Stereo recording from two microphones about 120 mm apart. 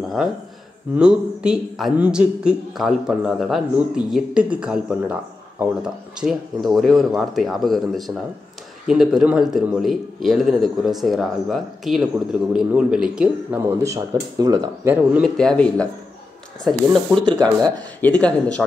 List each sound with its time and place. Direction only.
0.9 s a man's voice: 10° right (ahead or behind)
13.8 s speech: 30° right (ahead or behind)
15.2 s a man's voice: 5° left (ahead or behind)